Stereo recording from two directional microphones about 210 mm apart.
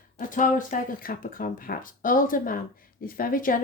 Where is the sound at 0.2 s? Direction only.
40° left (ahead or behind).